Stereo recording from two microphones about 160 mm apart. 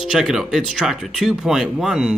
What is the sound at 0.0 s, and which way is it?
Speech, 5° right (ahead or behind).